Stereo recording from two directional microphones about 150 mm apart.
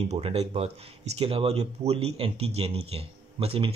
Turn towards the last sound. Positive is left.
turn(degrees=-40)  # may be behind; listen again after turning